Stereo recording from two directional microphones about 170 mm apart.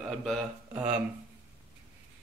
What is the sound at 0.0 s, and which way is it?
Speech, centre (ahead or behind).